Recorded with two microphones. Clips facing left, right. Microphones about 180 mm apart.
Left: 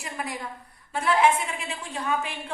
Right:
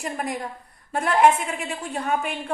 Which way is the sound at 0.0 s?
45° right (ahead or behind).